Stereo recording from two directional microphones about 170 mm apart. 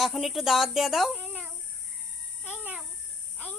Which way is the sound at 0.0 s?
Centre (ahead or behind).